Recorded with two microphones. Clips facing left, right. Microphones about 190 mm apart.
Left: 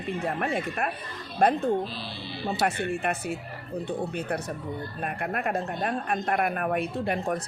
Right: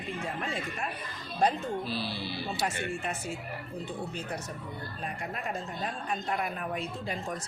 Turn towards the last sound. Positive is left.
turn(degrees=60)  # may be behind; listen again after turning